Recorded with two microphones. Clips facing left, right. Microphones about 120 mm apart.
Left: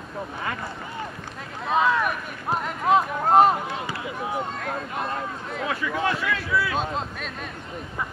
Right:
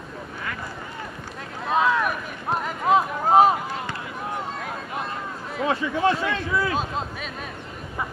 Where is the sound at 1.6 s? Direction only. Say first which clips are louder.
Even; centre (ahead or behind).